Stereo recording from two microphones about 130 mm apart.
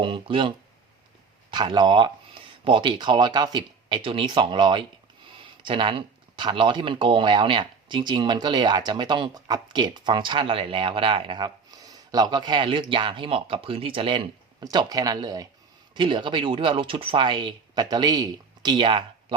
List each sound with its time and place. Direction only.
0.0 s speech: 40° right (ahead or behind)
1.5 s speech: 35° right (ahead or behind)
14.6 s speech: 30° right (ahead or behind)